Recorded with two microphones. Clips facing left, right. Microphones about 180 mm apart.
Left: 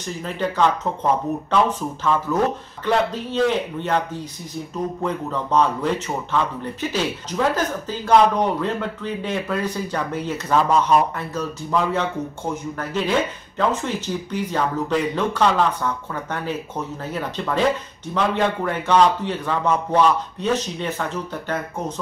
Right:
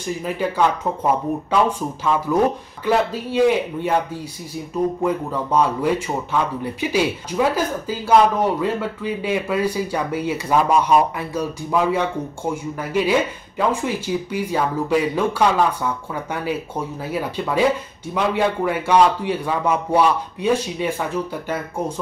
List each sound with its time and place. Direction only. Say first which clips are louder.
0.0 s speech: right 2 dB; 10° right (ahead or behind)